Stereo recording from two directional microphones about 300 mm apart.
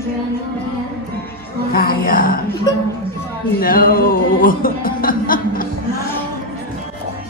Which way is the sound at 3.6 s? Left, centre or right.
Left.